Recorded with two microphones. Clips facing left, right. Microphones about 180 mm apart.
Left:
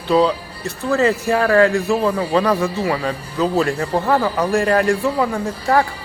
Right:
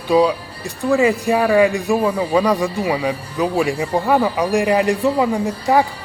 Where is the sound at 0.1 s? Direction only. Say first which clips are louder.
Right 1 dB; 10° right (ahead or behind).